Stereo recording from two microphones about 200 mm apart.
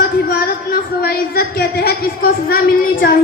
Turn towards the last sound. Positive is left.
turn(degrees=50)  # may be behind; listen again after turning